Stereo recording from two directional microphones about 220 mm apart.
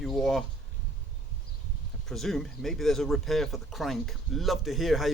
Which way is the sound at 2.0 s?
Centre (ahead or behind).